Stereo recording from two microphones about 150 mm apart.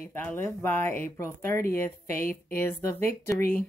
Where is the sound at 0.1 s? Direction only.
15° left (ahead or behind).